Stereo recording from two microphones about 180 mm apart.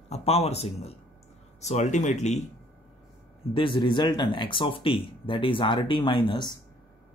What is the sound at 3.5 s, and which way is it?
Speech, 25° left (ahead or behind).